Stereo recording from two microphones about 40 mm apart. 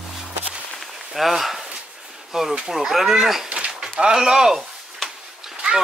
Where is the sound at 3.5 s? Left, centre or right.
Right.